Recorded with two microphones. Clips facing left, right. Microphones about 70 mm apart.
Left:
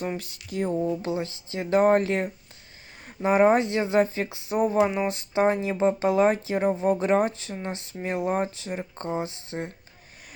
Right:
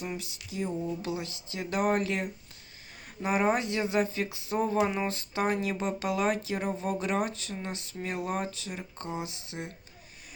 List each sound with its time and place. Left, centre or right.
0.0 s speech: left
1.0 s speech: left